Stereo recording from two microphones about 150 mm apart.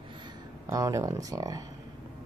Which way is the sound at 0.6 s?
20° right (ahead or behind).